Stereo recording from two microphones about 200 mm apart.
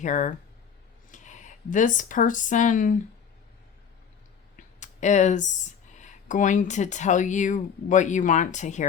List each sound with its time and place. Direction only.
0.0 s speech: 40° left (ahead or behind)
4.5 s speech: 35° left (ahead or behind)